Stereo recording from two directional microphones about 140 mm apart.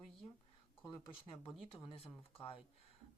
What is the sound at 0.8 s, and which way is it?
Speech, 35° left (ahead or behind).